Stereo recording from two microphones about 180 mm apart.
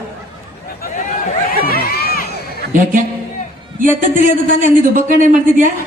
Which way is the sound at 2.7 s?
45° right (ahead or behind).